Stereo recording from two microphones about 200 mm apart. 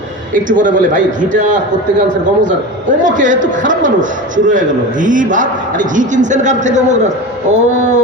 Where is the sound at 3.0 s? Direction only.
40° right (ahead or behind).